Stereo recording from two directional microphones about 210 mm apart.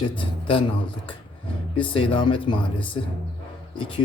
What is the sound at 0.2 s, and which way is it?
Speech, 25° left (ahead or behind).